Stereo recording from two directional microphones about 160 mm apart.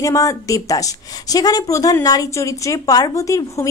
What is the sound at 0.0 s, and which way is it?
A woman's voice, 20° left (ahead or behind).